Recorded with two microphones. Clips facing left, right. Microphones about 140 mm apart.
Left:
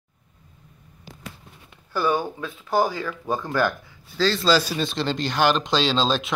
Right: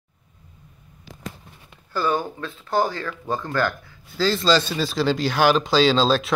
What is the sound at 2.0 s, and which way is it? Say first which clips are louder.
Speech: even; 10° left (ahead or behind).